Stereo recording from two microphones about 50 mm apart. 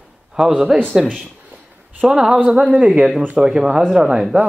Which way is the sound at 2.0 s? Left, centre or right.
Centre.